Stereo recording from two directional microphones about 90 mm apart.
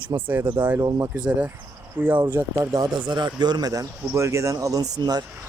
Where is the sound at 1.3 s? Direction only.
15° right (ahead or behind).